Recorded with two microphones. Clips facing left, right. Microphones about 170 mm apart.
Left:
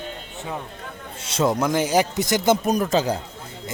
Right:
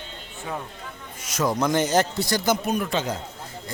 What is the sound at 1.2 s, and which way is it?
Speech, 30° left (ahead or behind).